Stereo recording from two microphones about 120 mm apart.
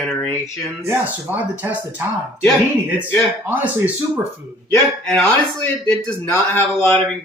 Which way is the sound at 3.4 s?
15° right (ahead or behind).